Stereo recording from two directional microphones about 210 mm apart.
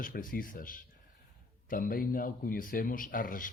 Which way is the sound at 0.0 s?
40° left (ahead or behind).